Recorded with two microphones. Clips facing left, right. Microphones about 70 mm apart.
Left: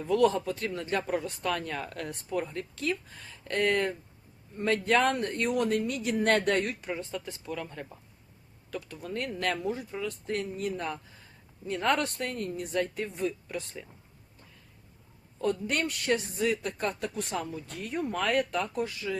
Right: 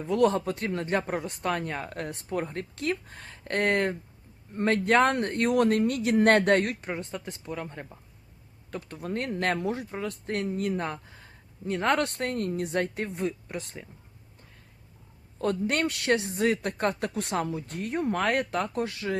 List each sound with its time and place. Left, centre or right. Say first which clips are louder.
0.0 s speech: right 1 dB; right
7.1 s speech: even; right
8.7 s speech: right 3 dB; right
9.6 s speech: right 2 dB; right
10.1 s speech: right 4 dB; right
13.1 s speech: right 1 dB; right
15.4 s speech: right 2 dB; right
16.3 s speech: right 3 dB; right
16.6 s speech: right 4 dB; right
17.7 s speech: right 3 dB; right
18.8 s speech: right 2 dB; right